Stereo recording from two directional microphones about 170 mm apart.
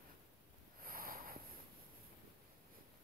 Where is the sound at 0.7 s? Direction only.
55° right (ahead or behind).